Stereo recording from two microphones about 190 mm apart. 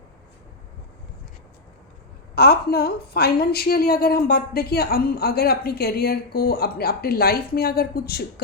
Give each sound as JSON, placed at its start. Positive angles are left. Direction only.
{"t": 2.3, "sound": "a woman's voice", "side_deg": 55}